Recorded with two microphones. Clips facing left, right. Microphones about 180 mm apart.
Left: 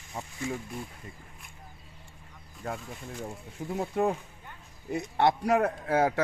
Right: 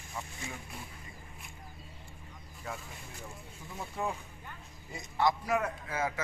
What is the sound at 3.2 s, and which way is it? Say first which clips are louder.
A man's voice: left 10 dB; 60° left (ahead or behind).